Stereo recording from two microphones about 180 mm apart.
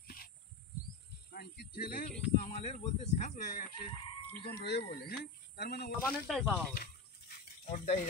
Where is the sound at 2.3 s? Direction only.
40° left (ahead or behind).